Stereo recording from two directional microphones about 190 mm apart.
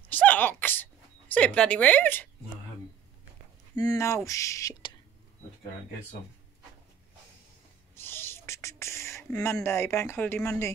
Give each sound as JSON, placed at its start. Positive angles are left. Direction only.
{"t": 0.1, "sound": "sneeze", "side_deg": 10}
{"t": 1.3, "sound": "a woman's voice", "side_deg": 5}
{"t": 3.7, "sound": "a woman's voice", "side_deg": 20}
{"t": 7.9, "sound": "a sound", "side_deg": 10}